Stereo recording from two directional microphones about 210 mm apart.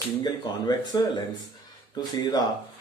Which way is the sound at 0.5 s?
20° left (ahead or behind).